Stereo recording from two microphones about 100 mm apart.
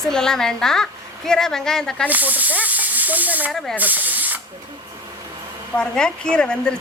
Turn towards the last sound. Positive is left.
turn(degrees=10)  # may be behind; listen again after turning